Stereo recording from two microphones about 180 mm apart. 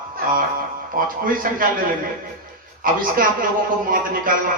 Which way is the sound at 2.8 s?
50° right (ahead or behind).